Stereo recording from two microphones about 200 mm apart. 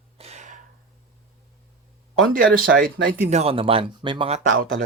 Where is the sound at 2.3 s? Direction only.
45° right (ahead or behind).